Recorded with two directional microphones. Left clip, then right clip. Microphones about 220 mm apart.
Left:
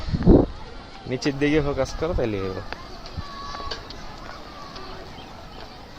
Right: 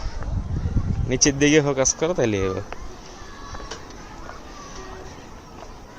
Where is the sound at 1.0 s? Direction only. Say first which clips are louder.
Right 5 dB; 30° right (ahead or behind).